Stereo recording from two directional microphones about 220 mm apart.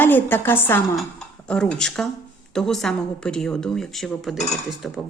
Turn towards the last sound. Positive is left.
turn(degrees=0)  # may be behind; listen again after turning